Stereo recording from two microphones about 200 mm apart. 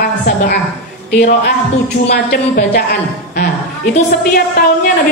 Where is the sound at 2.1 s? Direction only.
50° left (ahead or behind).